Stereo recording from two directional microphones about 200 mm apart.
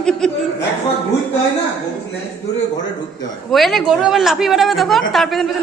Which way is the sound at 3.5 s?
Centre (ahead or behind).